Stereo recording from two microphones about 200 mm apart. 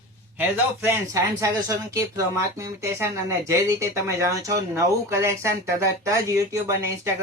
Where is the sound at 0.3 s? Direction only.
10° right (ahead or behind).